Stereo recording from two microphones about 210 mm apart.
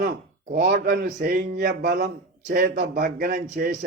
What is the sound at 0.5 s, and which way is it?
A man's voice, 45° right (ahead or behind).